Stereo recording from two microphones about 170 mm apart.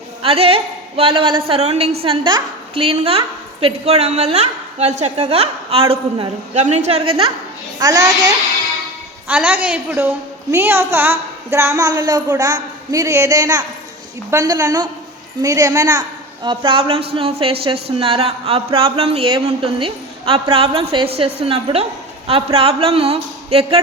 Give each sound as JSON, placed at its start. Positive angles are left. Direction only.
{"t": 0.2, "sound": "a woman's voice", "side_deg": -35}
{"t": 7.8, "sound": "a woman's voice", "side_deg": -20}
{"t": 9.2, "sound": "a woman's voice", "side_deg": -10}